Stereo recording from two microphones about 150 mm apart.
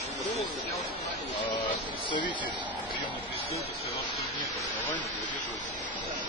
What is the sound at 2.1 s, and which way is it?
Speech, 30° left (ahead or behind).